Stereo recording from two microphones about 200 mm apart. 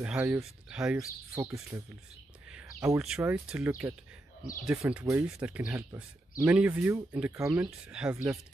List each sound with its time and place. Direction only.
0.0 s speech: 5° right (ahead or behind)
0.9 s speech: 15° right (ahead or behind)
2.5 s a sound: 15° right (ahead or behind)
3.2 s speech: 10° right (ahead or behind)